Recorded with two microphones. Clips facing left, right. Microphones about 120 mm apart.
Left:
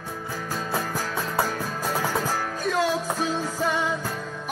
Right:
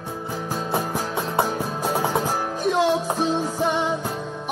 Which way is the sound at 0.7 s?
20° right (ahead or behind).